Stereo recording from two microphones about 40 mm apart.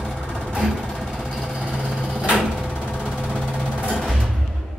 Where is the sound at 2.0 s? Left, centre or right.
Centre.